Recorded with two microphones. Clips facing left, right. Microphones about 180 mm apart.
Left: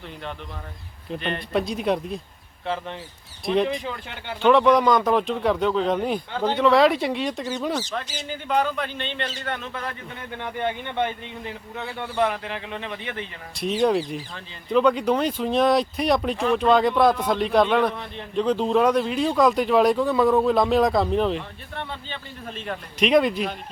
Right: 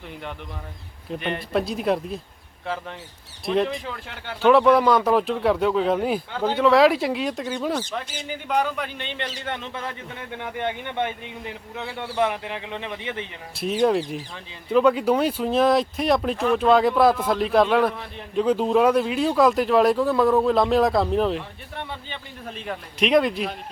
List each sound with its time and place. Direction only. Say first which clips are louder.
1.5 s speech: even; centre (ahead or behind)
3.4 s speech: left 1 dB; centre (ahead or behind)
8.3 s speech: left 1 dB; 10° right (ahead or behind)
13.6 s speech: even; 5° right (ahead or behind)